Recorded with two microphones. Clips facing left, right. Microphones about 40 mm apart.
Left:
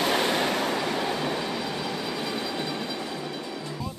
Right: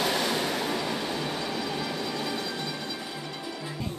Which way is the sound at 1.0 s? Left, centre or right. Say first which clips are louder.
Left 3 dB; left.